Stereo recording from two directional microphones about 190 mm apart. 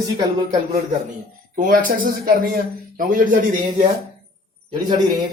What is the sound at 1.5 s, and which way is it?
A man's voice, 45° right (ahead or behind).